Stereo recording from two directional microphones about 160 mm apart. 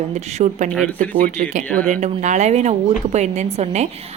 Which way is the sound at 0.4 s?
45° right (ahead or behind).